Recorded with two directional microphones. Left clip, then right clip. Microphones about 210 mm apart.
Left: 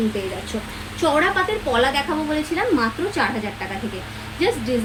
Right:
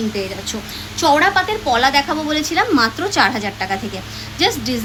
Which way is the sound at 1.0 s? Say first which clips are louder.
Right 5 dB; 55° right (ahead or behind).